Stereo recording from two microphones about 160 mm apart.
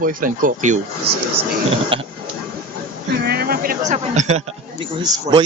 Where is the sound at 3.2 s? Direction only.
80° right.